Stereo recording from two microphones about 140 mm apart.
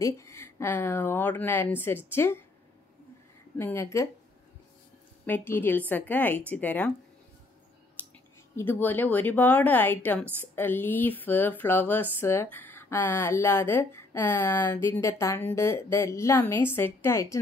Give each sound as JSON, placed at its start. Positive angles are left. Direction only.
{"t": 0.0, "sound": "speech", "side_deg": 20}
{"t": 3.5, "sound": "a woman's voice", "side_deg": 15}
{"t": 5.2, "sound": "speech", "side_deg": 15}
{"t": 8.5, "sound": "speech", "side_deg": 15}